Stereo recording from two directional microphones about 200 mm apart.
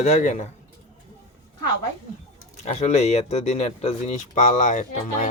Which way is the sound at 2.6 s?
35° left (ahead or behind).